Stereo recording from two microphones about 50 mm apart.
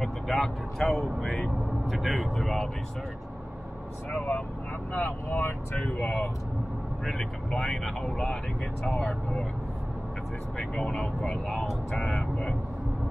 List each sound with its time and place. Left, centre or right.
0.0 s speech: centre
4.9 s speech: left
5.8 s speech: centre
7.1 s speech: centre
8.8 s speech: centre
10.6 s speech: centre